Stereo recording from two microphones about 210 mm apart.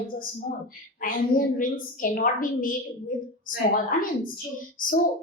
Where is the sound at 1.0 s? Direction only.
40° left (ahead or behind).